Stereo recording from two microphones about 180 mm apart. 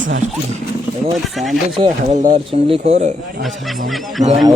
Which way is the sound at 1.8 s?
30° right (ahead or behind).